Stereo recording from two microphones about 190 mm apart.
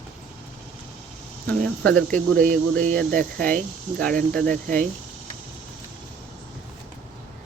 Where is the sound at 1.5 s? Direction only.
5° left (ahead or behind).